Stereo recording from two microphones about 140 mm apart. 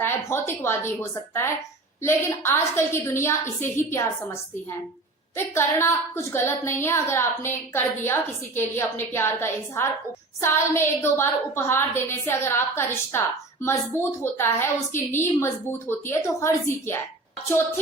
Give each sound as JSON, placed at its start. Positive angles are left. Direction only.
{"t": 0.0, "sound": "a woman's voice", "side_deg": 15}
{"t": 5.5, "sound": "a woman's voice", "side_deg": 20}